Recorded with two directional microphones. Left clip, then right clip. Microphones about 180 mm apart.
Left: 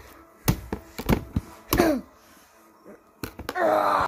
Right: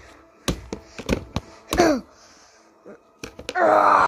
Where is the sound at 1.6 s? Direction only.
15° right (ahead or behind).